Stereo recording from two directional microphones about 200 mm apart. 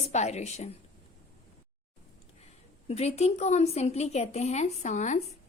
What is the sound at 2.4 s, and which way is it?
A woman's voice, 30° left (ahead or behind).